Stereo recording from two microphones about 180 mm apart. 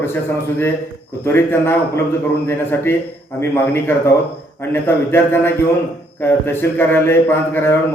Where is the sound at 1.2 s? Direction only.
10° left (ahead or behind).